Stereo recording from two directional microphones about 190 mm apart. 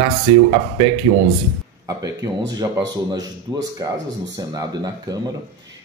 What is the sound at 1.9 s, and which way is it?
Speech, 20° right (ahead or behind).